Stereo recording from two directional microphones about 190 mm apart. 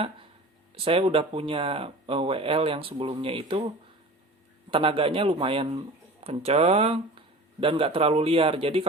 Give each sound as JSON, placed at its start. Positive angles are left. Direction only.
{"t": 0.9, "sound": "speech", "side_deg": -30}
{"t": 4.7, "sound": "speech", "side_deg": -30}